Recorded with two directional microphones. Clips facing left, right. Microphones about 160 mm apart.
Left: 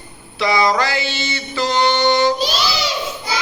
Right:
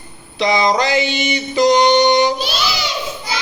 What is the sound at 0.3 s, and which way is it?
Mantra, 20° right (ahead or behind).